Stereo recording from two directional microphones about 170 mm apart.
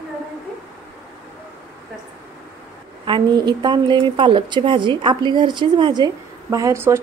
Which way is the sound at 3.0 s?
25° right (ahead or behind).